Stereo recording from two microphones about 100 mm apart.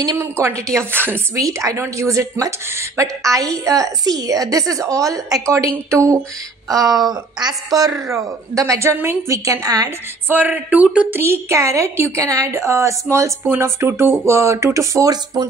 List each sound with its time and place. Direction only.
0.0 s a woman's voice: 30° right (ahead or behind)
1.3 s a woman's voice: 35° right (ahead or behind)
10.2 s a woman's voice: 20° right (ahead or behind); by 15.4 s 35° right (ahead or behind)